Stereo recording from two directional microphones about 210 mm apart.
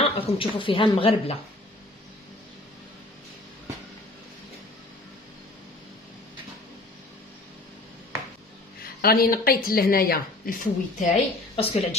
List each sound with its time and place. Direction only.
0.0 s a woman's voice: 25° left (ahead or behind)
8.8 s a woman's voice: 45° left (ahead or behind)
11.5 s speech: 30° left (ahead or behind)